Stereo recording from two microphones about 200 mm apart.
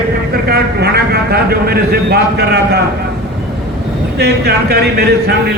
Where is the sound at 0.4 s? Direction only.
55° right (ahead or behind).